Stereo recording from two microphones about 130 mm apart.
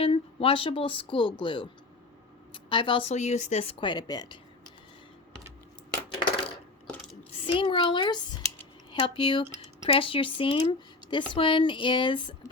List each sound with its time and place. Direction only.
0.0 s speech: 45° left (ahead or behind)
3.1 s speech: 60° left (ahead or behind)
3.8 s speech: 35° left (ahead or behind)
7.4 s a child's voice: 40° left (ahead or behind)